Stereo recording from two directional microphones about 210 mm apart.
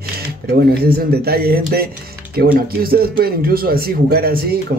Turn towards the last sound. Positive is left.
turn(degrees=-45)  # may be behind; listen again after turning